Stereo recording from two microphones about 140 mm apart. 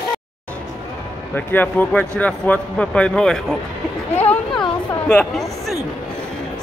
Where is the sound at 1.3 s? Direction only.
15° left (ahead or behind).